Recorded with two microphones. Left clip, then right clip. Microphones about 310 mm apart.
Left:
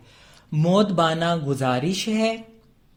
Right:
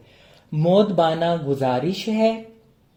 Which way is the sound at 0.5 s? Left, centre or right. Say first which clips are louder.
Right 3 dB; left.